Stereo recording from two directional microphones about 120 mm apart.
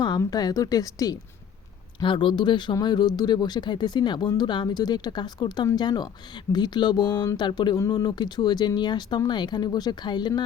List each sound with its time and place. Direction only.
0.2 s speech: 30° left (ahead or behind)
2.0 s speech: 45° left (ahead or behind)